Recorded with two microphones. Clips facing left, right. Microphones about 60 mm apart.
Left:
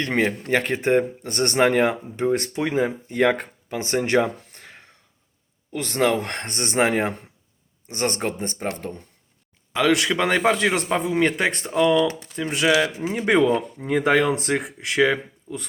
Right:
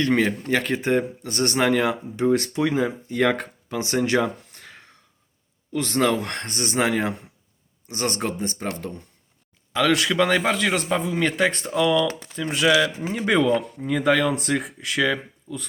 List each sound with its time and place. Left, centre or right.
0.0 s speech: left
9.7 s speech: centre; by 15.5 s left